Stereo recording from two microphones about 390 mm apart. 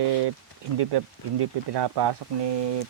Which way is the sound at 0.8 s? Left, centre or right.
Right.